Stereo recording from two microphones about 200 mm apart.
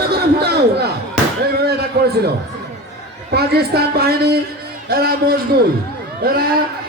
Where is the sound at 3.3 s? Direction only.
50° right (ahead or behind).